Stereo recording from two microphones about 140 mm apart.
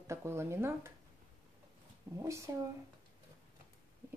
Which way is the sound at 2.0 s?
20° right (ahead or behind).